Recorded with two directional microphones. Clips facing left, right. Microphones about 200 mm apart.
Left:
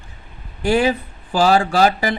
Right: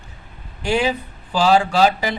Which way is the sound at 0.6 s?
50° left (ahead or behind).